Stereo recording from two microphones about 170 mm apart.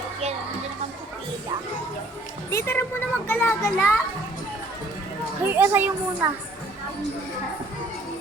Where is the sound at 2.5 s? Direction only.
15° left (ahead or behind).